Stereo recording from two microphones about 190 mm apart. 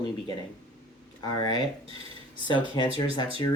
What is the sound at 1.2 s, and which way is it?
Speech, 20° left (ahead or behind).